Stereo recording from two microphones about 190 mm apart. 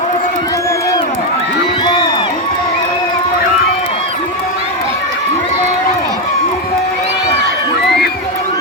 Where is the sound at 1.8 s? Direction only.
25° left (ahead or behind).